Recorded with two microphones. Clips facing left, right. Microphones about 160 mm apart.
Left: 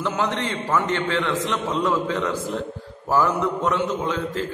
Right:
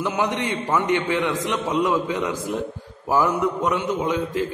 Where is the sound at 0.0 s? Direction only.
15° right (ahead or behind).